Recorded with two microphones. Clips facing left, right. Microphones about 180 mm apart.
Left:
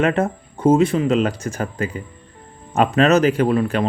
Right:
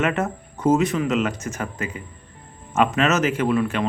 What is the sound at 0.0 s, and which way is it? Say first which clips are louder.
Speech: left 4 dB; 30° left (ahead or behind).